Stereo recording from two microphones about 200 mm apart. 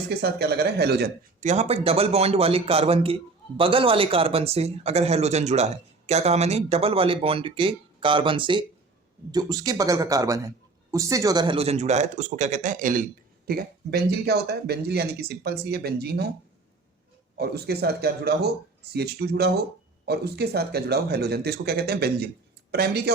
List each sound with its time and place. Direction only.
0.1 s speech: 55° right (ahead or behind)
1.4 s a man's voice: 35° right (ahead or behind)
13.5 s speech: 55° right (ahead or behind)
17.3 s speech: 55° right (ahead or behind)